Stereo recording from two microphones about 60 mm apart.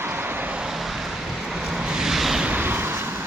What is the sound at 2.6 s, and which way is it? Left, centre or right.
Vehicle, right.